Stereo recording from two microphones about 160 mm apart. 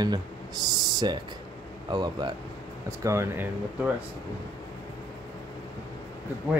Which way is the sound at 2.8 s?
15° right (ahead or behind).